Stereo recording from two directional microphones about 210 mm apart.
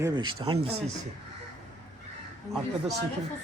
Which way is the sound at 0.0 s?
20° right (ahead or behind).